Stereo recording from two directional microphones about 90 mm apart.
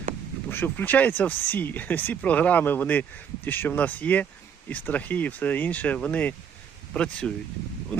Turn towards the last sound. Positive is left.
turn(degrees=10)  # may be behind; listen again after turning